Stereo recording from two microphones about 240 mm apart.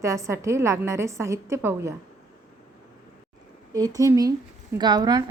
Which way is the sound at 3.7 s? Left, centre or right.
Centre.